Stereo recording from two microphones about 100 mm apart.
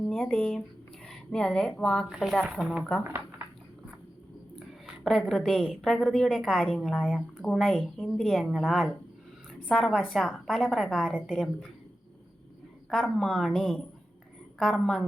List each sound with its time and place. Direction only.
0.0 s speech: 5° left (ahead or behind)
1.0 s a sound: 10° left (ahead or behind)
1.8 s speech: 10° left (ahead or behind)
3.0 s speech: 25° right (ahead or behind)
5.0 s speech: centre (ahead or behind)
12.9 s speech: 5° left (ahead or behind)